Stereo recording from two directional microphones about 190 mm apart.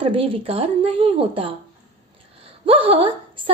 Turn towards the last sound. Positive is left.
turn(degrees=-30)  # may be behind; listen again after turning